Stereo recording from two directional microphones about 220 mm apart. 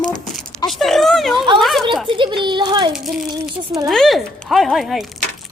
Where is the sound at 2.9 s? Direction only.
Centre (ahead or behind).